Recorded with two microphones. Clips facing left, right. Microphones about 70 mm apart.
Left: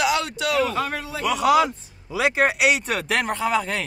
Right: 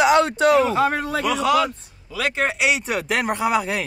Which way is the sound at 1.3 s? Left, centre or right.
Centre.